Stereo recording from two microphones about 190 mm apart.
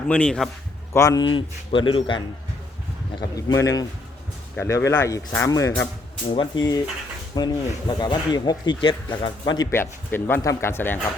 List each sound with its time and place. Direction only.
0.1 s a man's voice: 5° left (ahead or behind)
0.9 s speech: 20° left (ahead or behind)
3.3 s speech: 15° left (ahead or behind)
6.3 s speech: 25° left (ahead or behind)
9.7 s speech: 10° left (ahead or behind)